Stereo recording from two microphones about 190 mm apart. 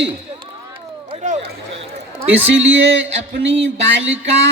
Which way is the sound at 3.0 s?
75° right (ahead or behind).